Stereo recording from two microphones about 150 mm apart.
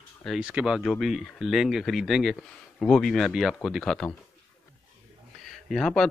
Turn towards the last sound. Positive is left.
turn(degrees=0)  # may be behind; listen again after turning